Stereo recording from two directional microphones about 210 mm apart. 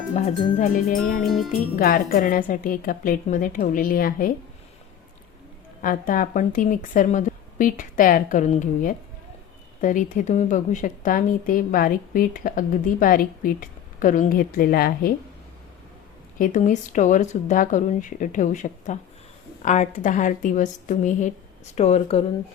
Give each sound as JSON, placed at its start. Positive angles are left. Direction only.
{"t": 0.6, "sound": "a woman's voice", "side_deg": 40}
{"t": 1.2, "sound": "speech", "side_deg": 0}
{"t": 1.7, "sound": "a woman's voice", "side_deg": 40}
{"t": 5.8, "sound": "a woman's voice", "side_deg": 40}
{"t": 16.4, "sound": "a woman's voice", "side_deg": 35}